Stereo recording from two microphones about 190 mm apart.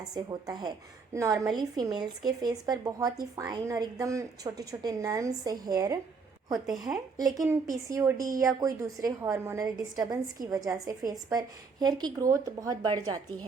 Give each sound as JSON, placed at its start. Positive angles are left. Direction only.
{"t": 0.1, "sound": "a woman's voice", "side_deg": -20}